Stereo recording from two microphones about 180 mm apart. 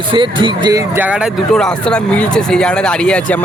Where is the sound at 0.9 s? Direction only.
10° right (ahead or behind).